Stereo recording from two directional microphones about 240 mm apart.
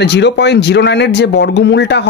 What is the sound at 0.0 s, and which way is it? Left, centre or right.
Speech, left.